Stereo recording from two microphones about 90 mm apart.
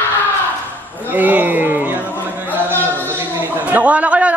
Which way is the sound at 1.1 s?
20° right (ahead or behind).